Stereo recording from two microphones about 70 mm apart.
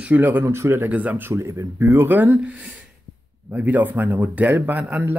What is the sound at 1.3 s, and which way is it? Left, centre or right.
Speech, right.